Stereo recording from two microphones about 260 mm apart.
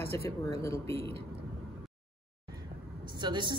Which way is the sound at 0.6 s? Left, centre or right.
Centre.